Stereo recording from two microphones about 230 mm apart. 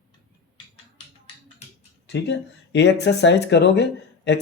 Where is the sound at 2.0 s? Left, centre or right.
Left.